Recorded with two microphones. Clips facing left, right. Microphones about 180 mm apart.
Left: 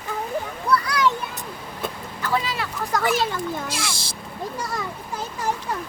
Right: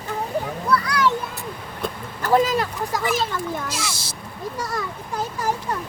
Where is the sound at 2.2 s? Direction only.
45° right (ahead or behind).